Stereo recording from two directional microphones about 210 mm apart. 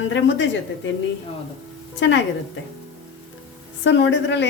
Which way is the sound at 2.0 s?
60° left (ahead or behind).